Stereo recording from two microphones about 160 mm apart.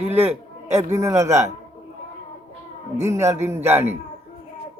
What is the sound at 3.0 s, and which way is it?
Speech, 20° right (ahead or behind).